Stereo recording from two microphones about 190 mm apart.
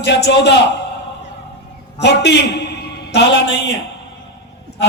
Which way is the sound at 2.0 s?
65° left (ahead or behind).